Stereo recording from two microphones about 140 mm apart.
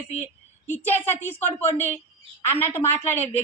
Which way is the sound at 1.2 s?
15° left (ahead or behind).